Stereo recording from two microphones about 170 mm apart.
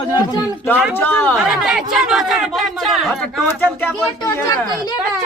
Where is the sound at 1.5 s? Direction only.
Centre (ahead or behind); by 4.9 s 20° left (ahead or behind).